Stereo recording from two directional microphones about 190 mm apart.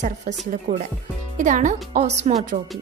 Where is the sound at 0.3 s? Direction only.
40° right (ahead or behind).